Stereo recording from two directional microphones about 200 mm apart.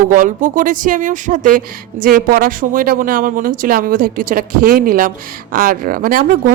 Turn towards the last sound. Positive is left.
turn(degrees=-45)  # may be behind; listen again after turning